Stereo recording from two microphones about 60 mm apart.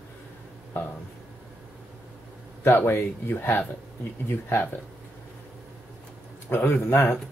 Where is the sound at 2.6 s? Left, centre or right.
Left.